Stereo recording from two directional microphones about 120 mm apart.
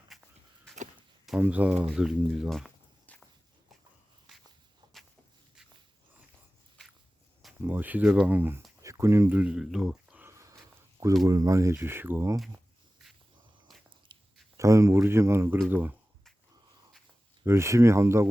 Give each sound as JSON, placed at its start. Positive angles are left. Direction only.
{"t": 0.1, "sound": "a sound", "side_deg": 0}
{"t": 1.4, "sound": "speech", "side_deg": -15}
{"t": 3.1, "sound": "walk", "side_deg": 15}
{"t": 4.3, "sound": "walk", "side_deg": 0}
{"t": 7.7, "sound": "speech", "side_deg": -15}
{"t": 9.4, "sound": "speech", "side_deg": -5}
{"t": 10.2, "sound": "a sound", "side_deg": -25}
{"t": 11.3, "sound": "speech", "side_deg": -30}
{"t": 13.7, "sound": "biting", "side_deg": 0}
{"t": 14.1, "sound": "a sound", "side_deg": -40}
{"t": 14.5, "sound": "speech", "side_deg": -25}
{"t": 17.4, "sound": "speech", "side_deg": -20}